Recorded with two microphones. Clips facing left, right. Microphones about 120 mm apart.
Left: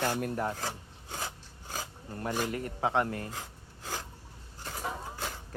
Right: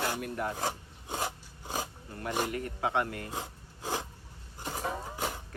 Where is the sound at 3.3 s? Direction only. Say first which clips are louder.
Right 4 dB; 20° right (ahead or behind).